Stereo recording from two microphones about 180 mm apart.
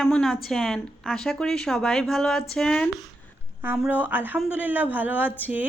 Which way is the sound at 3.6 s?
10° right (ahead or behind).